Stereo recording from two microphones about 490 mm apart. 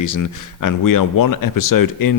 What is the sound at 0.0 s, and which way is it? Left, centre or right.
A man's voice, left.